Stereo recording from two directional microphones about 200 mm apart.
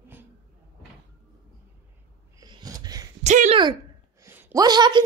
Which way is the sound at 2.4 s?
20° right (ahead or behind).